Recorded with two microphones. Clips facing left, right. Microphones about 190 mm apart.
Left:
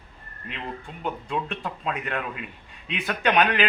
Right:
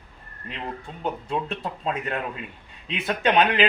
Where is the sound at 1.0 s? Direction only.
30° right (ahead or behind).